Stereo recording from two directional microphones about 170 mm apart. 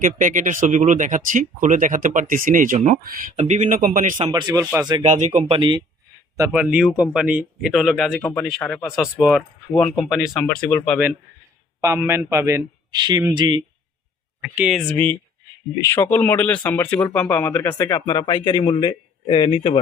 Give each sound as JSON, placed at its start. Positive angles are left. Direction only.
{"t": 0.0, "sound": "speech", "side_deg": -50}
{"t": 3.2, "sound": "speech", "side_deg": -50}
{"t": 4.3, "sound": "speech", "side_deg": -25}
{"t": 5.0, "sound": "speech", "side_deg": -45}
{"t": 6.3, "sound": "speech", "side_deg": -20}
{"t": 6.6, "sound": "a man's voice", "side_deg": -5}
{"t": 11.8, "sound": "a man's voice", "side_deg": -15}
{"t": 14.4, "sound": "speech", "side_deg": -5}